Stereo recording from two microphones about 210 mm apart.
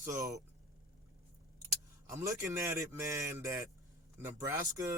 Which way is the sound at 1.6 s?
10° right (ahead or behind).